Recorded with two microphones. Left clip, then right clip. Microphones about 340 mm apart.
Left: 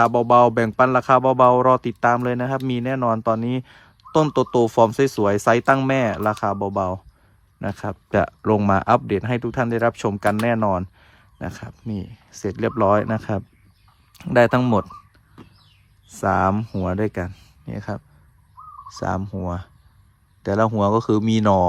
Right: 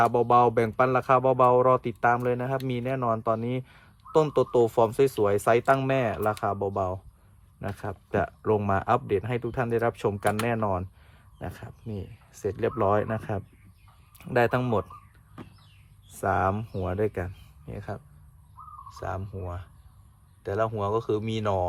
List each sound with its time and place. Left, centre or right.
0.0 s speech: left
16.1 s speech: left